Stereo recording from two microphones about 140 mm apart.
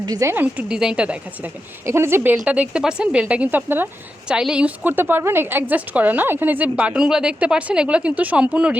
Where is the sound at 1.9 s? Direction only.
20° right (ahead or behind).